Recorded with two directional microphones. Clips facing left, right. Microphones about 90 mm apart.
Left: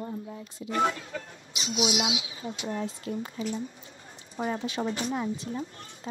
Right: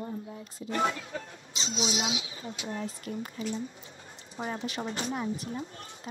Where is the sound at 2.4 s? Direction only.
35° left (ahead or behind).